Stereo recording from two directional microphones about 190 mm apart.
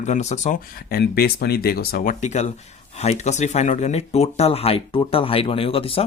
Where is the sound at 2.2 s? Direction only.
35° left (ahead or behind).